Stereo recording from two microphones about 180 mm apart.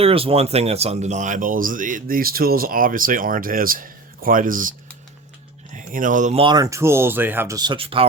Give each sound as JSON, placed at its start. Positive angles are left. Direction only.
{"t": 0.0, "sound": "speech", "side_deg": -30}
{"t": 5.7, "sound": "speech", "side_deg": -45}
{"t": 6.4, "sound": "speech", "side_deg": -20}